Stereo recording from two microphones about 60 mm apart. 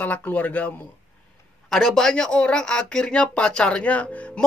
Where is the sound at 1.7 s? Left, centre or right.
Centre.